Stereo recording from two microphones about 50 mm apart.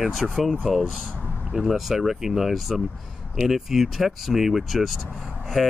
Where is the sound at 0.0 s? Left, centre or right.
Centre.